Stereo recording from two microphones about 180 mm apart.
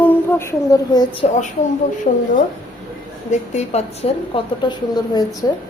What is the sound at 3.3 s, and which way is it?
A woman's voice, 35° left (ahead or behind).